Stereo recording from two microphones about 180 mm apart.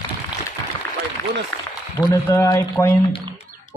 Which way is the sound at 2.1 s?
15° left (ahead or behind).